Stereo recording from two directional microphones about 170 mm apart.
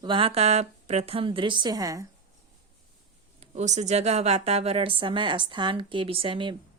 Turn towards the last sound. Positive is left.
turn(degrees=-30)  # may be behind; listen again after turning